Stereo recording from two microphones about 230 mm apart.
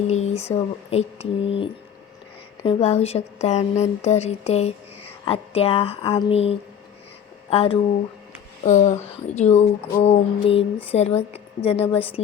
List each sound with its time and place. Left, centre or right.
0.1 s a woman's voice: left